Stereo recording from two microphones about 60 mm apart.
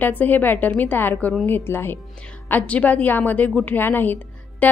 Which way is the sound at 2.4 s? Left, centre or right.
Left.